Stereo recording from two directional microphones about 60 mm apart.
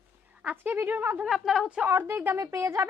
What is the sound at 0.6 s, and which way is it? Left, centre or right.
Speech, right.